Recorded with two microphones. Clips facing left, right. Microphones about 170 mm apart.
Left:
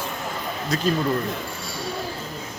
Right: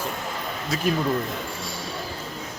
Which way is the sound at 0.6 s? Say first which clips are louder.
Left 2 dB; 5° right (ahead or behind).